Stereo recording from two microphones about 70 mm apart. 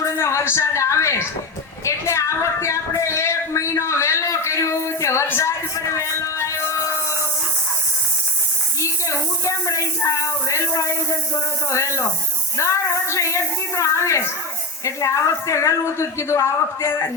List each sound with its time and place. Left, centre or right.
0.0 s a sound: left
1.8 s speech: left
8.8 s speech: left